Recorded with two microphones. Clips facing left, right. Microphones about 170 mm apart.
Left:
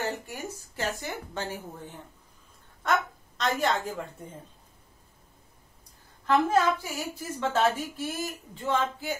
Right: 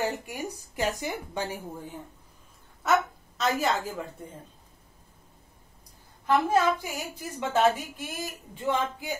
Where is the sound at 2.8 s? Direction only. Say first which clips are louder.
Right 3 dB; 5° right (ahead or behind).